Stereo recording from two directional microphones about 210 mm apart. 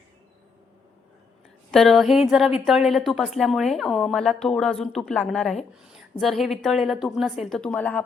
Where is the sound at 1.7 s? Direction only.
Centre (ahead or behind).